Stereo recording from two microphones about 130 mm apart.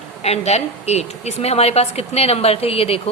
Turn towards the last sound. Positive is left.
turn(degrees=50)  # may be behind; listen again after turning